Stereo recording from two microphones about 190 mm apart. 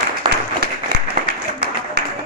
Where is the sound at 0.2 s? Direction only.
25° right (ahead or behind).